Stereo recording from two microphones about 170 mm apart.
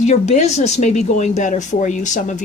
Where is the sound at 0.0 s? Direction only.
45° left (ahead or behind).